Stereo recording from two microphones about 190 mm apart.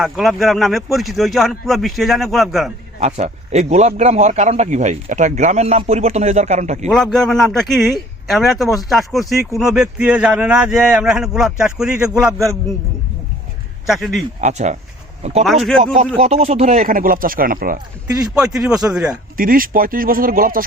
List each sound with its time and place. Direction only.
0.0 s speech: centre (ahead or behind)
3.0 s a man's voice: 35° right (ahead or behind)
6.8 s speech: 5° left (ahead or behind)
13.8 s speech: centre (ahead or behind)
14.4 s a man's voice: 40° right (ahead or behind)
18.3 s speech: 5° right (ahead or behind)
19.4 s speech: 50° right (ahead or behind)